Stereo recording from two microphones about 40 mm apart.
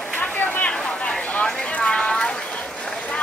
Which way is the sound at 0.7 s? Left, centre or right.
Left.